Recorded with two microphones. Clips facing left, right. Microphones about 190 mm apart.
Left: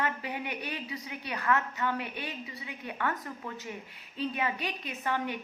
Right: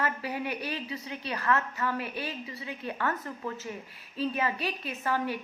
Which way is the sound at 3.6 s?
20° left (ahead or behind).